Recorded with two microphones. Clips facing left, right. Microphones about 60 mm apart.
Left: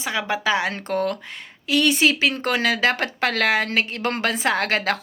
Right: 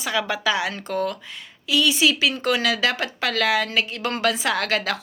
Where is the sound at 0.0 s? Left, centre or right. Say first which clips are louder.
Even; left.